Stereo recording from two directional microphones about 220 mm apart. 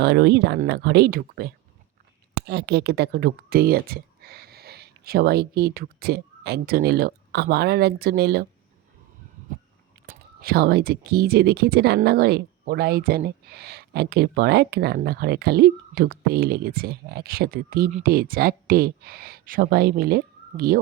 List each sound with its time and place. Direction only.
0.0 s speech: 50° right (ahead or behind)
10.1 s speech: 45° right (ahead or behind)